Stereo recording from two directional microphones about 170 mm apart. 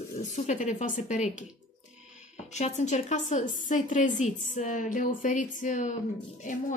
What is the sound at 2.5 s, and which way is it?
A woman's voice, 40° left (ahead or behind).